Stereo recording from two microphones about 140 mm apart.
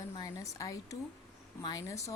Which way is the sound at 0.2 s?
25° left (ahead or behind).